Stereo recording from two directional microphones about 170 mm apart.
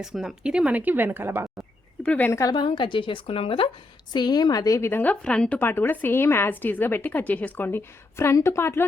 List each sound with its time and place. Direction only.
0.0 s speech: 5° right (ahead or behind)
2.0 s a woman's voice: 10° left (ahead or behind)